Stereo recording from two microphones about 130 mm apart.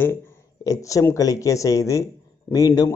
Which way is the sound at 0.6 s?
25° left (ahead or behind).